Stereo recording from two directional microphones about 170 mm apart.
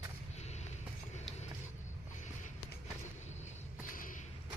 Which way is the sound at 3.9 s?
55° left (ahead or behind).